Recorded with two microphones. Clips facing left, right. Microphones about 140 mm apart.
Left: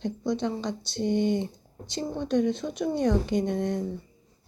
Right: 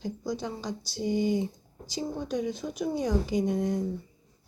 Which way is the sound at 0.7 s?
65° left (ahead or behind).